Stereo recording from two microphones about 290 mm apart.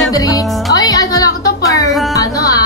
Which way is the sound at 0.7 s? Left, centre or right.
Centre.